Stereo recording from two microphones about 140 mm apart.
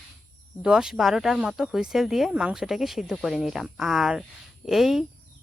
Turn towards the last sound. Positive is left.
turn(degrees=0)  # may be behind; listen again after turning